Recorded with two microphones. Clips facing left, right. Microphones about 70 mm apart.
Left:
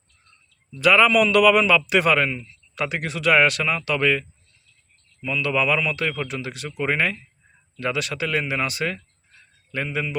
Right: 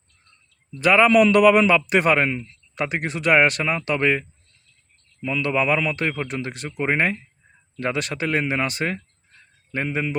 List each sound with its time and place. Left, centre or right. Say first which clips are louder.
0.8 s a man's voice: right 1 dB; right